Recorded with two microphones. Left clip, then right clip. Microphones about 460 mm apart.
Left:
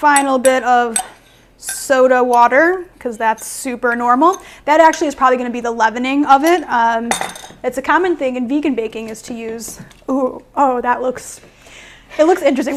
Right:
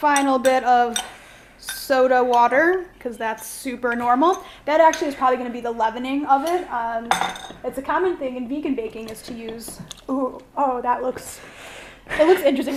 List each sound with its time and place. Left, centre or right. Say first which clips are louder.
0.0 s a woman's voice: left 6 dB; left
7.6 s a woman's voice: left 7 dB; left
10.1 s a woman's voice: left 7 dB; left
12.2 s a woman's voice: left 4 dB; left